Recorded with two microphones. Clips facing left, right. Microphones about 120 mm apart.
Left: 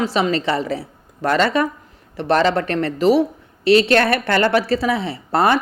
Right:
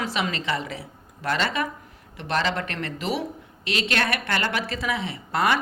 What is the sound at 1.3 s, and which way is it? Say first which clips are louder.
A woman's voice: left 8 dB; 50° left (ahead or behind).